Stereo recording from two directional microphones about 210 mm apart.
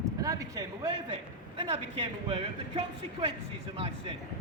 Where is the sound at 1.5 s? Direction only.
30° right (ahead or behind).